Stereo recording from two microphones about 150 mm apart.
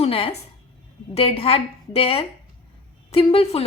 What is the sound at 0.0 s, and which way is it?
A woman's voice, 40° left (ahead or behind).